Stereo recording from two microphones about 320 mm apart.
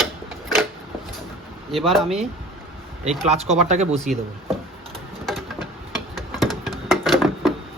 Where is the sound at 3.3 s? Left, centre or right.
Right.